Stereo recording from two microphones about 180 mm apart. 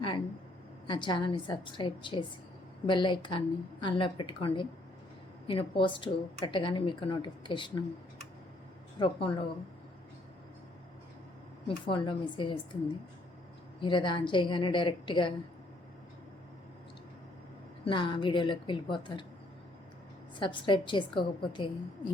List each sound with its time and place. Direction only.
0.9 s a woman's voice: 25° left (ahead or behind)
9.0 s a woman's voice: 30° left (ahead or behind)
11.9 s a woman's voice: 30° left (ahead or behind)
13.8 s a woman's voice: 25° left (ahead or behind)
17.8 s a woman's voice: 25° left (ahead or behind)
20.4 s a woman's voice: 25° left (ahead or behind)